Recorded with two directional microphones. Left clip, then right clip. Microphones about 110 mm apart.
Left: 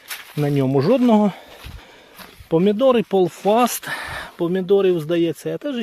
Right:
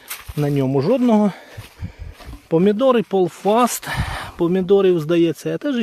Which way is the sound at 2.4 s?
20° right (ahead or behind).